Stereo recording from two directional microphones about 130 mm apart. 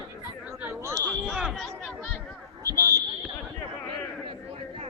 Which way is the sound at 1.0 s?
5° right (ahead or behind).